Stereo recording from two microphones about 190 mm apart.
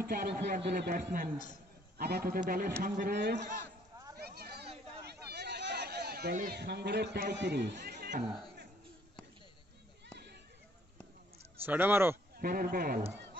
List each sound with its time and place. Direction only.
0.0 s a man's voice: 50° right (ahead or behind)
4.2 s a sound: 55° right (ahead or behind)
6.3 s a man's voice: 55° right (ahead or behind)
11.6 s speech: 10° right (ahead or behind)
12.4 s a man's voice: 50° right (ahead or behind)